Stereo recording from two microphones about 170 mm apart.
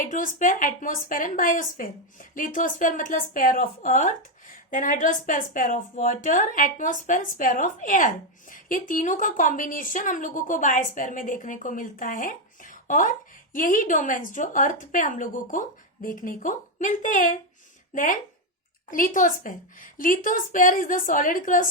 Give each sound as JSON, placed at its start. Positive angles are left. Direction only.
{"t": 0.0, "sound": "a woman's voice", "side_deg": 50}